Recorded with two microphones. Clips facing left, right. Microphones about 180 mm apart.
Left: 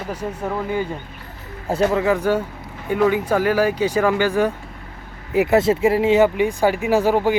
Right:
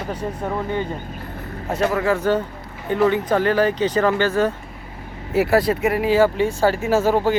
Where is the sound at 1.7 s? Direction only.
30° left (ahead or behind).